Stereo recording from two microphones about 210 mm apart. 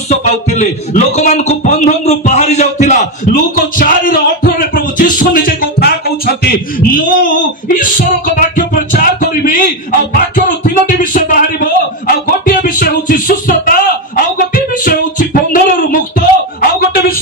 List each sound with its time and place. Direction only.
0.1 s a man's voice: 30° left (ahead or behind)
3.5 s music: 45° left (ahead or behind)
7.6 s music: 40° left (ahead or behind)